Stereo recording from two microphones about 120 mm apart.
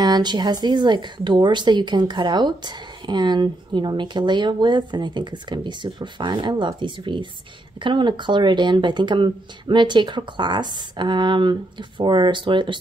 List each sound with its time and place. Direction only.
0.0 s speech: 35° right (ahead or behind)